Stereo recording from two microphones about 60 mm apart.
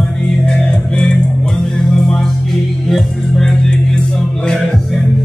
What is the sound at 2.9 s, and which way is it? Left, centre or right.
Music, centre.